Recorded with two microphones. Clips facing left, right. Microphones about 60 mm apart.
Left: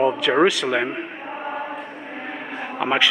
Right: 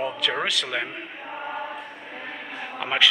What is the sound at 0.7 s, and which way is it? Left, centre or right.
Speech, centre.